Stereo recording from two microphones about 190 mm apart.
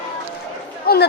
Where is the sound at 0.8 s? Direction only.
55° left (ahead or behind).